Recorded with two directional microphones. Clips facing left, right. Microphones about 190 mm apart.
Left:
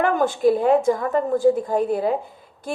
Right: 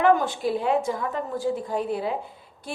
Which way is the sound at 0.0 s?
50° left (ahead or behind).